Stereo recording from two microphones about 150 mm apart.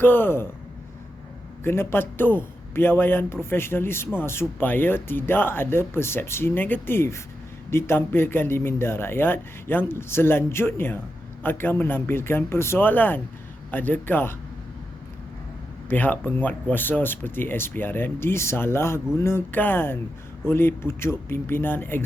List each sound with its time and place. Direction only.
0.0 s speech: 15° left (ahead or behind)
1.6 s speech: 15° left (ahead or behind)
15.9 s speech: 10° left (ahead or behind)